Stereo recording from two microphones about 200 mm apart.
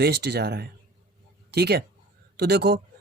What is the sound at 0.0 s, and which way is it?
Speech, 55° right (ahead or behind).